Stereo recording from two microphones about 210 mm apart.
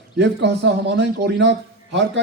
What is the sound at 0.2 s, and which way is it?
A man's voice, 55° right (ahead or behind).